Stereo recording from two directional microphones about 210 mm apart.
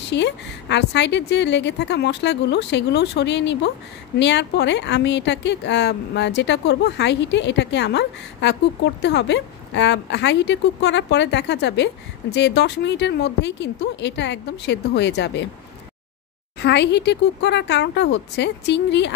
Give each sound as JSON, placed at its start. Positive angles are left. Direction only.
{"t": 0.1, "sound": "a woman's voice", "side_deg": 55}
{"t": 16.6, "sound": "a woman's voice", "side_deg": 55}